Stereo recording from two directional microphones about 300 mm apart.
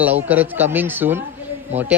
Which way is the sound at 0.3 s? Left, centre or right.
Centre.